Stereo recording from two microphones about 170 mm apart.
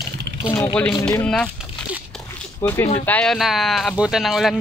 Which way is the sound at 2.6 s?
15° left (ahead or behind).